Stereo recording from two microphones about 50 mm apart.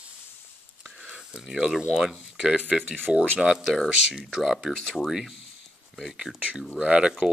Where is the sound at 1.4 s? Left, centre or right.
Centre.